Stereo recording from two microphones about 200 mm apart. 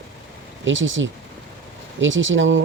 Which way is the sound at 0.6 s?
70° right (ahead or behind).